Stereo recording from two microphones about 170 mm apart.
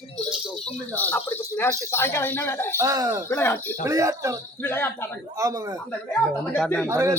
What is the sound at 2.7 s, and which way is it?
Speech, 20° right (ahead or behind).